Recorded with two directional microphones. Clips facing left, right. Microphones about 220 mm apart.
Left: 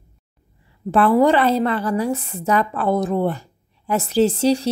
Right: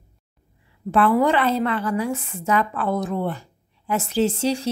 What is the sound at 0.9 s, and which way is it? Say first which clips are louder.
A woman's voice: left 3 dB; 35° left (ahead or behind).